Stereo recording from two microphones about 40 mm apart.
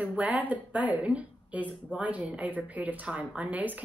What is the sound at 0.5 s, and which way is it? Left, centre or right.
Speech, right.